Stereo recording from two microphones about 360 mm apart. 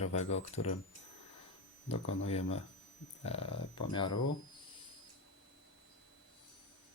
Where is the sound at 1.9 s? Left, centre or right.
Left.